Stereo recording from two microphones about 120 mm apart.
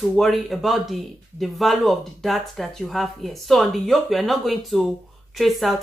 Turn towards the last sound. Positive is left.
turn(degrees=0)  # may be behind; listen again after turning